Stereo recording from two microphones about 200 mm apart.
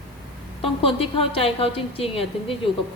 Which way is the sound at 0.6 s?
25° left (ahead or behind).